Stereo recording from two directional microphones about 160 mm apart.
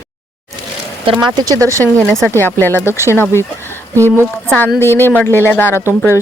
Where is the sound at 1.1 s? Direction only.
25° right (ahead or behind).